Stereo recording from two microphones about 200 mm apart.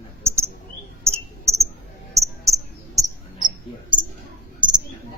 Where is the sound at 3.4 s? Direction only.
25° right (ahead or behind).